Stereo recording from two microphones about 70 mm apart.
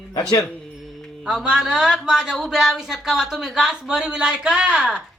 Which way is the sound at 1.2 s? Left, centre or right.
Centre.